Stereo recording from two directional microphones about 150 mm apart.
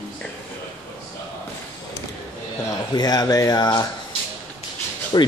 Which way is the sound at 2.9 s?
25° left (ahead or behind).